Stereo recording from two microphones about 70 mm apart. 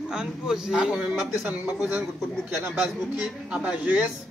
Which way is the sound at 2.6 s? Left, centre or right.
Centre.